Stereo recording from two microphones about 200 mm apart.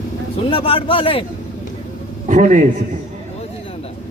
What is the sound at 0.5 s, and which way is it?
Speech, 25° left (ahead or behind).